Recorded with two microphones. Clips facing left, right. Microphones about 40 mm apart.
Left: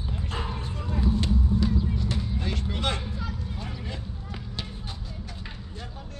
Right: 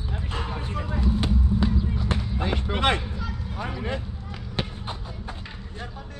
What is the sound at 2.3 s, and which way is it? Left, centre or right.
Speech, right.